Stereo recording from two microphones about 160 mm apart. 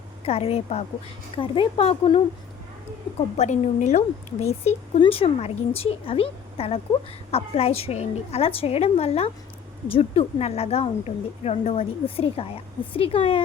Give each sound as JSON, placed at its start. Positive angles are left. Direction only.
{"t": 0.3, "sound": "speech", "side_deg": 40}
{"t": 3.3, "sound": "speech", "side_deg": 50}